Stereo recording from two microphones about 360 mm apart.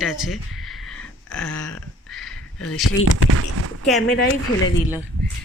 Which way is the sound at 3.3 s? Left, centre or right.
Right.